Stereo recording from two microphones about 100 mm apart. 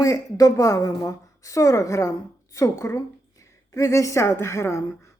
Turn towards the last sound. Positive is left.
turn(degrees=30)  # may be behind; listen again after turning